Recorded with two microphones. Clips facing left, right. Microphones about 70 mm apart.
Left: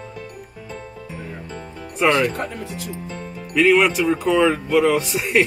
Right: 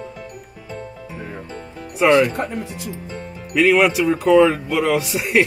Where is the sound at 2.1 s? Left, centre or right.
Right.